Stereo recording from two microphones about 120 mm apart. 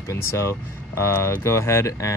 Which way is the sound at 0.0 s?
25° left (ahead or behind).